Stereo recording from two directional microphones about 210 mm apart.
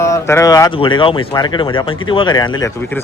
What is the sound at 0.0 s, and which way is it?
A man's voice, 15° left (ahead or behind).